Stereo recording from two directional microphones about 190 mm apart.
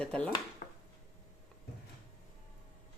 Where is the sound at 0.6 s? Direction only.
45° left (ahead or behind).